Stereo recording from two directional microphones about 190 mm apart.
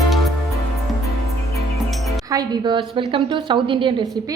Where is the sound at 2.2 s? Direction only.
20° right (ahead or behind).